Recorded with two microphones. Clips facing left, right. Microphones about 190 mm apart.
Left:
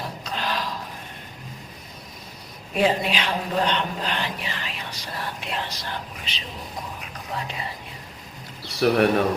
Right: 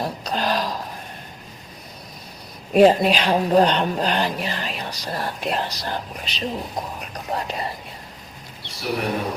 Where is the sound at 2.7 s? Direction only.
40° right (ahead or behind).